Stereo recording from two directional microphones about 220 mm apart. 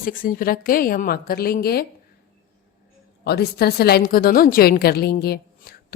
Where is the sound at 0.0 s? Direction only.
40° left (ahead or behind).